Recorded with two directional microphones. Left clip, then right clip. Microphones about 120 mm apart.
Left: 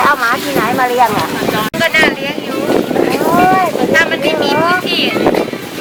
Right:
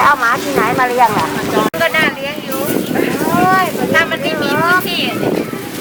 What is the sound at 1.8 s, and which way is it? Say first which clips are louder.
Vehicle: left 5 dB; centre (ahead or behind).